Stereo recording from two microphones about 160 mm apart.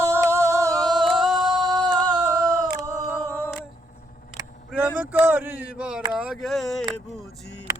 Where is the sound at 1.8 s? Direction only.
25° right (ahead or behind).